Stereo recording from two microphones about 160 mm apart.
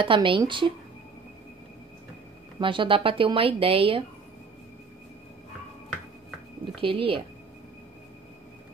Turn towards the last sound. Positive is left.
turn(degrees=-35)  # may be behind; listen again after turning